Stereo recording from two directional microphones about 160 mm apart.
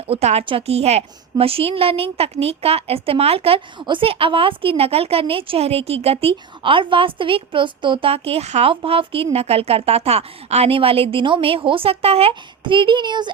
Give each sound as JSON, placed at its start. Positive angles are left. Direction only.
{"t": 0.1, "sound": "a woman's voice", "side_deg": -40}